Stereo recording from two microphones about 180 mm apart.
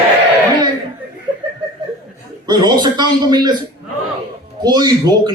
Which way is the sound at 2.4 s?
25° right (ahead or behind).